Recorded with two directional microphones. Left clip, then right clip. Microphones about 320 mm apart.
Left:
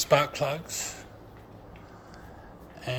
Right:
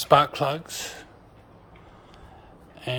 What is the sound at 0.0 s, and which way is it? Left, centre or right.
Speech, centre.